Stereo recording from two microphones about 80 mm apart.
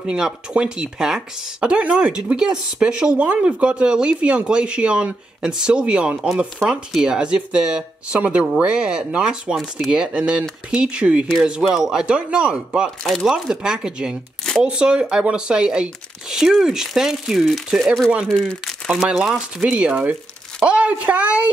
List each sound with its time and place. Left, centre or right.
0.0 s speech: centre
13.0 s speech: centre